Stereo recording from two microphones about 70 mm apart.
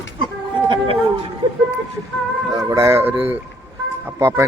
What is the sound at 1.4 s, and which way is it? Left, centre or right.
Speech, right.